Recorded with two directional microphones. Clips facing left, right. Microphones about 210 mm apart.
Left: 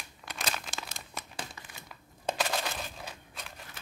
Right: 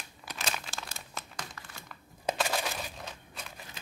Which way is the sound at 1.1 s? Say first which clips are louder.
Left 2 dB; 10° left (ahead or behind).